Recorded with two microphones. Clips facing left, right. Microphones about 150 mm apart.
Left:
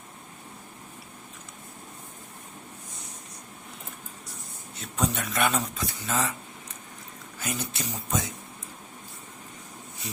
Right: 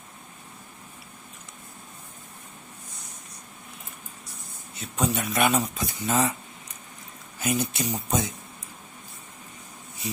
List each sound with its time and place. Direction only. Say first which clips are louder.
4.8 s speech: right 2 dB; 5° right (ahead or behind)
7.3 s speech: right 7 dB; 15° right (ahead or behind)